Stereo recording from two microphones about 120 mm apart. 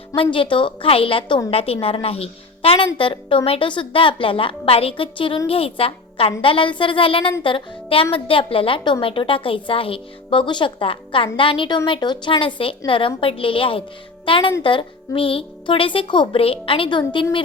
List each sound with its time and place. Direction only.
0.2 s speech: 45° left (ahead or behind)